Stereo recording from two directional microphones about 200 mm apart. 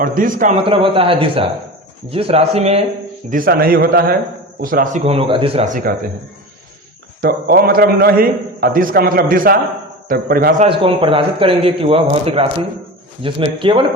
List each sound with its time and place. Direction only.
0.0 s a man's voice: 45° right (ahead or behind)
0.6 s a man's voice: 25° right (ahead or behind)
3.2 s a man's voice: 45° right (ahead or behind)
7.2 s a man's voice: 50° right (ahead or behind)
10.7 s a man's voice: 25° right (ahead or behind)